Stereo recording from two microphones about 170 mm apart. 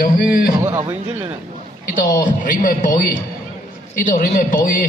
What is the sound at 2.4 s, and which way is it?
Speech, 50° left (ahead or behind).